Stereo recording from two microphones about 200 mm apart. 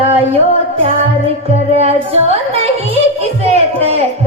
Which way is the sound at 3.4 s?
30° right (ahead or behind).